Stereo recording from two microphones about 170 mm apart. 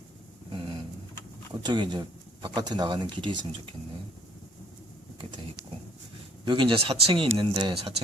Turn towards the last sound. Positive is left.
turn(degrees=-30)  # may be behind; listen again after turning